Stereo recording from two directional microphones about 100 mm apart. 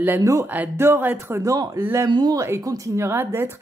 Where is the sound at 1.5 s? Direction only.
35° right (ahead or behind).